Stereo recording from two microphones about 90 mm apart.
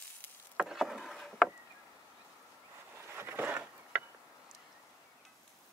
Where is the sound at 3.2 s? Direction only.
25° right (ahead or behind).